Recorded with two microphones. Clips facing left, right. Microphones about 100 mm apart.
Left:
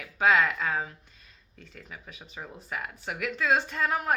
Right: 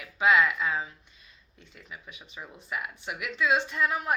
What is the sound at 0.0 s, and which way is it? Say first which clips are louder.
Speech: even; 40° left (ahead or behind).